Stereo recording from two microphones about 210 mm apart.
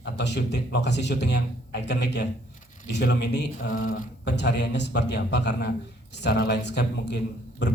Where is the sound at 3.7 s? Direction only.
40° left (ahead or behind).